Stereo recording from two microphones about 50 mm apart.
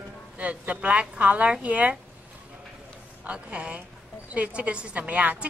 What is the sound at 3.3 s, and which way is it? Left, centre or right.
A woman's voice, right.